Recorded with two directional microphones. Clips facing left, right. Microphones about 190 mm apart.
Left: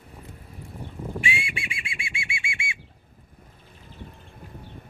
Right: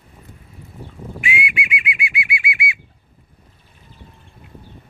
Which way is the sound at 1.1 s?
30° left (ahead or behind).